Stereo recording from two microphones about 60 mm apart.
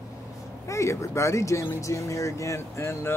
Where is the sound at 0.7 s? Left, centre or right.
Left.